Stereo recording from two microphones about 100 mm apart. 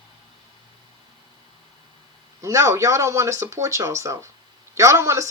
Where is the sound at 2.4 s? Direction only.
30° right (ahead or behind).